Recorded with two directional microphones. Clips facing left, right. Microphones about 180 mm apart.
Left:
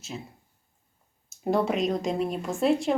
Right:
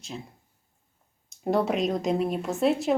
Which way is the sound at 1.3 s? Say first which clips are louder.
Even; centre (ahead or behind).